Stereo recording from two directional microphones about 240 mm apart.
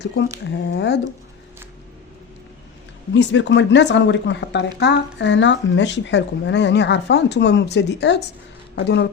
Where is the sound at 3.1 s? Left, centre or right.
Left.